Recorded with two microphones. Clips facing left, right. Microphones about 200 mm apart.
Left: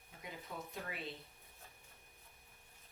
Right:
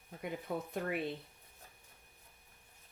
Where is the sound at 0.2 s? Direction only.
55° right (ahead or behind).